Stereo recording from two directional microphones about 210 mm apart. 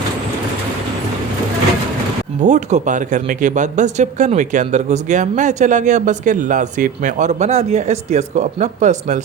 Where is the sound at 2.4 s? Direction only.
35° right (ahead or behind).